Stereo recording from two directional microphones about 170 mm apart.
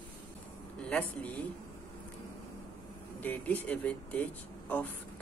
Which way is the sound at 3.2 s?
10° left (ahead or behind).